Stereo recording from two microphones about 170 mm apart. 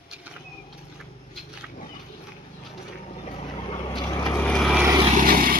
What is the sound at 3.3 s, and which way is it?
Vehicle, 30° left (ahead or behind).